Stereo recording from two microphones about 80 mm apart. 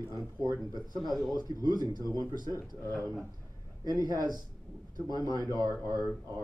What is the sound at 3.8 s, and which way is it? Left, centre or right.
A man's voice, right.